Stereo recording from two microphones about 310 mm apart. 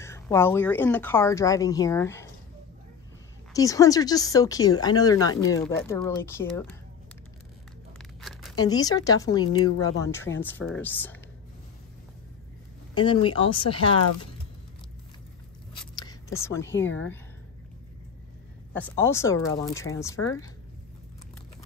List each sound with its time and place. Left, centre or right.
0.0 s speech: centre
3.5 s speech: centre
8.2 s a sound: centre
8.5 s speech: centre
12.9 s speech: centre
16.0 s speech: centre
18.7 s speech: centre